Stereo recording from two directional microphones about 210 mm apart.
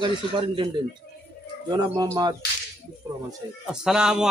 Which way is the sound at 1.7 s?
20° right (ahead or behind).